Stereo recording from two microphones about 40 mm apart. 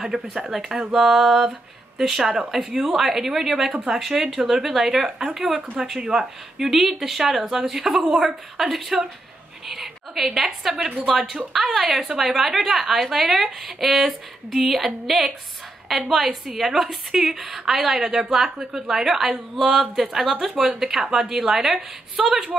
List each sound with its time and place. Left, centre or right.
0.0 s a woman's voice: centre
5.9 s a woman's voice: centre
6.7 s a woman's voice: centre